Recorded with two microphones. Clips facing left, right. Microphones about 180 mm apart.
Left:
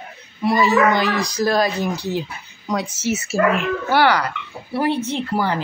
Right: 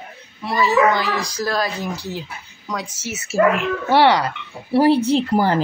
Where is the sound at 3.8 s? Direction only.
25° right (ahead or behind).